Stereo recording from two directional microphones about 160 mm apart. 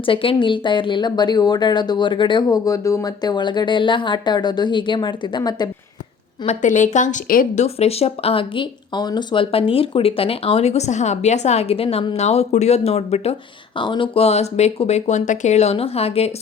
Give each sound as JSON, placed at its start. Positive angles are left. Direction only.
{"t": 0.0, "sound": "speech", "side_deg": 35}
{"t": 6.4, "sound": "a woman's voice", "side_deg": 45}
{"t": 7.6, "sound": "speech", "side_deg": 40}
{"t": 13.7, "sound": "speech", "side_deg": 30}